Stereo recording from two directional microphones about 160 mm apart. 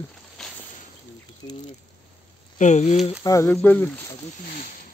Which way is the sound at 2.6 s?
45° left (ahead or behind).